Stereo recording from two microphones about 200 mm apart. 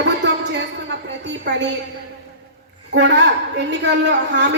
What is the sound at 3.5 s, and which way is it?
Speech, 60° right (ahead or behind).